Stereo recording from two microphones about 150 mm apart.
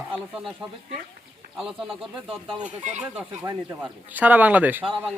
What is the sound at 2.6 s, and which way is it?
Speech, 50° right (ahead or behind).